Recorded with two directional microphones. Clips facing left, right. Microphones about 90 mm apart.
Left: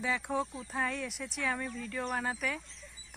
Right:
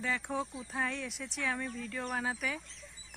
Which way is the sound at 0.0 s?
Centre (ahead or behind).